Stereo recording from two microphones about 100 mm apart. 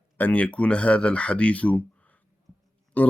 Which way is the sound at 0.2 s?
15° left (ahead or behind).